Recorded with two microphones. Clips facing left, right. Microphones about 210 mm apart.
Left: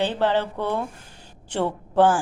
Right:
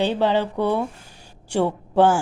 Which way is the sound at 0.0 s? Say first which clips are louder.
Right 2 dB; 15° right (ahead or behind).